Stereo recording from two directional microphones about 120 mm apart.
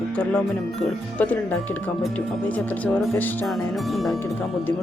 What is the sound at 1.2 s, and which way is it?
Speech, 15° left (ahead or behind).